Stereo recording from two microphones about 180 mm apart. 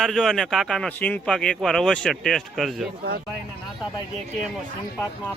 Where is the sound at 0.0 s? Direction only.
Centre (ahead or behind).